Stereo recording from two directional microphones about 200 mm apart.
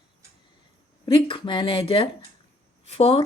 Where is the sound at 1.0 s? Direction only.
25° left (ahead or behind).